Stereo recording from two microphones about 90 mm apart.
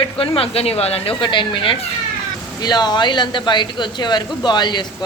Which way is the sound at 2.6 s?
50° left (ahead or behind).